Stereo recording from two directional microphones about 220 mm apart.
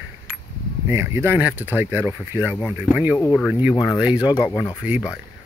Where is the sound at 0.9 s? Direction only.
10° right (ahead or behind).